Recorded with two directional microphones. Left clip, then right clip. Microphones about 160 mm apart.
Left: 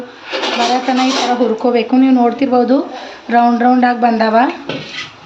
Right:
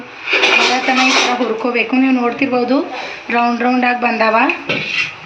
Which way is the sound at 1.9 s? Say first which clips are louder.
Left 3 dB; 85° left.